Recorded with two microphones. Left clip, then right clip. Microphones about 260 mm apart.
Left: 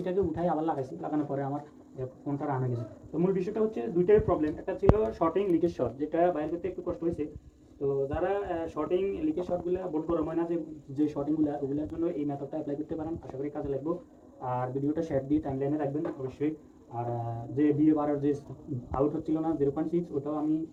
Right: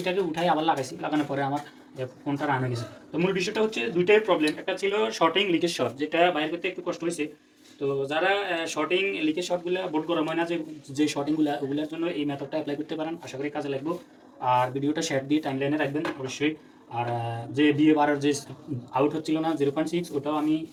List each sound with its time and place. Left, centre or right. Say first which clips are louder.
0.0 s speech: right 4 dB; right